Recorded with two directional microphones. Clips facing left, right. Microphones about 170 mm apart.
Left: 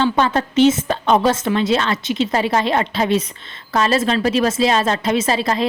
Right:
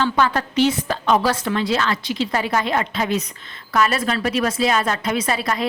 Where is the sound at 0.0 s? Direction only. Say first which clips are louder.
Left 2 dB; 25° left (ahead or behind).